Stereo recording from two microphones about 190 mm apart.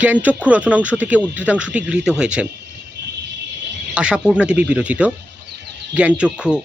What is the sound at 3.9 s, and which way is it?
Speech, 5° right (ahead or behind).